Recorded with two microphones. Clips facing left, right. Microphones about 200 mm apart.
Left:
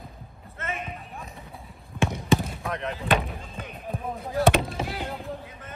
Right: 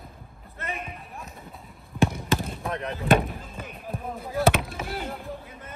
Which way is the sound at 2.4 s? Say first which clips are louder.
Even; centre (ahead or behind).